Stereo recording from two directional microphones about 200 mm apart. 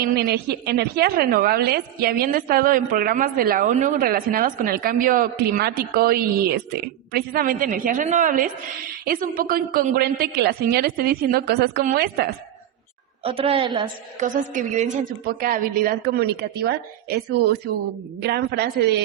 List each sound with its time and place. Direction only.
0.1 s a woman's voice: 55° right (ahead or behind)
13.2 s a woman's voice: 30° right (ahead or behind)
14.2 s a woman's voice: 40° right (ahead or behind); by 19.0 s 55° right (ahead or behind)